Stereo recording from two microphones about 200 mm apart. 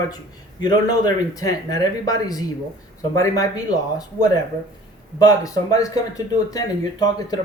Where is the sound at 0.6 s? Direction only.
20° left (ahead or behind).